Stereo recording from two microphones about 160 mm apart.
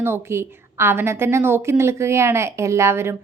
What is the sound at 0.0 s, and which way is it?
A woman's voice, 15° right (ahead or behind).